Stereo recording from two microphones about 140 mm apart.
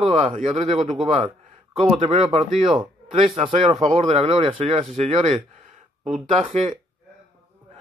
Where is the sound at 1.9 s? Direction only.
45° right (ahead or behind).